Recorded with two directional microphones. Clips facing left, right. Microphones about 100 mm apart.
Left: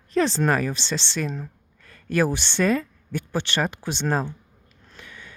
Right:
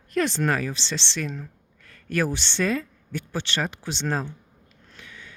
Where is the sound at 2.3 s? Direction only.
45° left (ahead or behind).